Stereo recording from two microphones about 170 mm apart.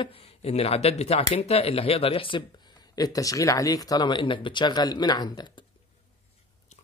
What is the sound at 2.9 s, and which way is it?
Speech, 20° left (ahead or behind).